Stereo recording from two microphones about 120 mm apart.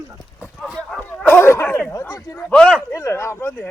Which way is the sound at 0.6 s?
Centre (ahead or behind).